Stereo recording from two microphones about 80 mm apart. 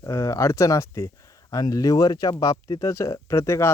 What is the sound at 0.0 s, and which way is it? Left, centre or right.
Speech, left.